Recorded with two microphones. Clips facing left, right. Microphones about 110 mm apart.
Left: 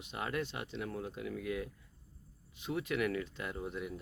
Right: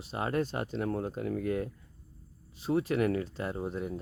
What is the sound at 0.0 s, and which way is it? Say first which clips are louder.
Speech: right 7 dB; 35° right (ahead or behind).